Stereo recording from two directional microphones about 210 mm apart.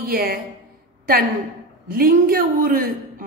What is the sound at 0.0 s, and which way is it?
Speech, 45° right (ahead or behind).